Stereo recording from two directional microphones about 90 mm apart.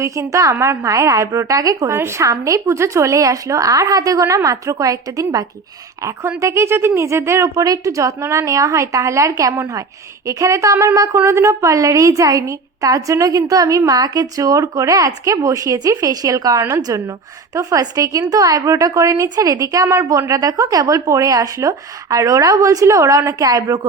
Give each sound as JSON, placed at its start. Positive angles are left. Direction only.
{"t": 0.0, "sound": "a woman's voice", "side_deg": -35}
{"t": 2.0, "sound": "a woman's voice", "side_deg": -30}